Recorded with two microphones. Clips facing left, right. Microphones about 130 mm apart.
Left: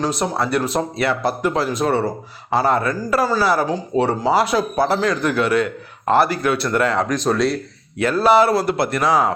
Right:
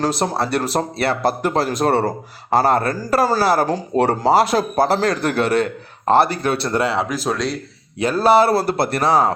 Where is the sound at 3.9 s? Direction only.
50° right (ahead or behind); by 6.8 s 30° right (ahead or behind).